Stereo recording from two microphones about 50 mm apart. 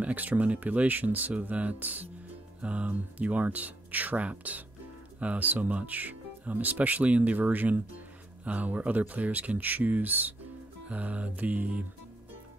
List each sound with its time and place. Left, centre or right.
0.0 s speech: right
10.9 s music: right